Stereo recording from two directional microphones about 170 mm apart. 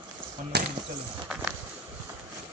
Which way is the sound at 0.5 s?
75° right (ahead or behind).